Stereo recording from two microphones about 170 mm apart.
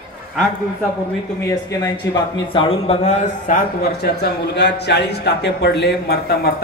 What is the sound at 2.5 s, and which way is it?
A man's voice, 35° left (ahead or behind).